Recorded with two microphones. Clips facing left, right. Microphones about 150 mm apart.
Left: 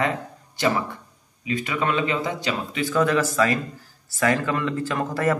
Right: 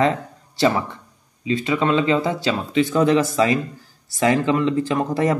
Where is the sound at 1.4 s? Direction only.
25° right (ahead or behind).